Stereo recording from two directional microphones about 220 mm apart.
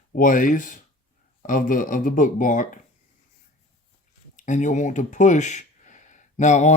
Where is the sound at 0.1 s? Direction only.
40° left (ahead or behind).